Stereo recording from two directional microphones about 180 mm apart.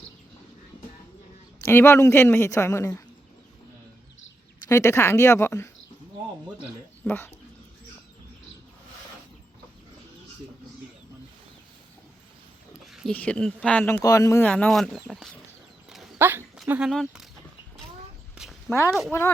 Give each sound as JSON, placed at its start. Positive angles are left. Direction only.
{"t": 1.6, "sound": "speech", "side_deg": 15}
{"t": 4.7, "sound": "speech", "side_deg": 15}
{"t": 7.0, "sound": "speech", "side_deg": 10}
{"t": 12.9, "sound": "speech", "side_deg": 0}
{"t": 16.1, "sound": "speech", "side_deg": -15}
{"t": 18.4, "sound": "a sound", "side_deg": -5}
{"t": 19.1, "sound": "speech", "side_deg": 15}